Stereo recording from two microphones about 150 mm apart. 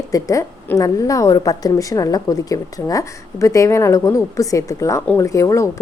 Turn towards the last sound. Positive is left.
turn(degrees=20)  # may be behind; listen again after turning